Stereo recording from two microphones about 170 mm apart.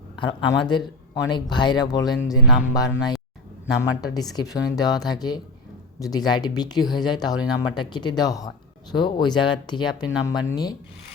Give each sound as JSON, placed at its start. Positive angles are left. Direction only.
{"t": 0.2, "sound": "speech", "side_deg": 25}